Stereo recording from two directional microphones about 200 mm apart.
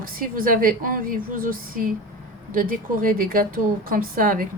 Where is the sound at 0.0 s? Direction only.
45° right (ahead or behind).